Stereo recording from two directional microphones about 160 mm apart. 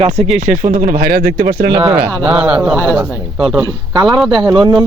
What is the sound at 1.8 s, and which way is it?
Speech, 5° right (ahead or behind).